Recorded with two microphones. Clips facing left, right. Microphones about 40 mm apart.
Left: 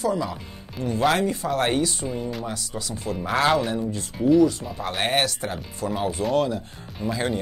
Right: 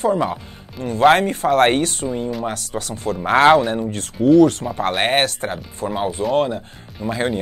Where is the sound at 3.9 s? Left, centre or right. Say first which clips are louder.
Right 6 dB; right.